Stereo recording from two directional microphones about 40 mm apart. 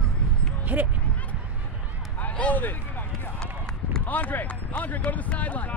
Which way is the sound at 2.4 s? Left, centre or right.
Left.